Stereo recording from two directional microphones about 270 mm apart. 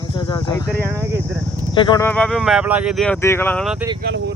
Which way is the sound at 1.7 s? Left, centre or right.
Centre.